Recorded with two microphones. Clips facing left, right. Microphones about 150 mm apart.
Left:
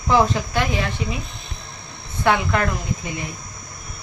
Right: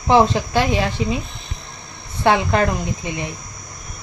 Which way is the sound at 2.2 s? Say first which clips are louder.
Right 3 dB; 30° right (ahead or behind).